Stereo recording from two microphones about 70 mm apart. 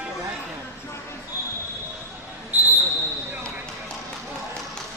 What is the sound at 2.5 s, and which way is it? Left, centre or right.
Basketball bounce, right.